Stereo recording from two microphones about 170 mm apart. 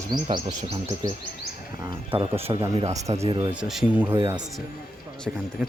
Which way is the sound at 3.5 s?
5° right (ahead or behind).